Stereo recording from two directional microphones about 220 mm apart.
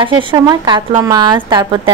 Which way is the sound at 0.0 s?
20° right (ahead or behind).